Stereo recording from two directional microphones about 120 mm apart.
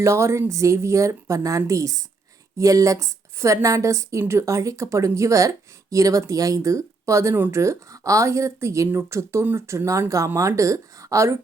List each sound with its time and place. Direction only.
0.0 s a woman's voice: 25° right (ahead or behind)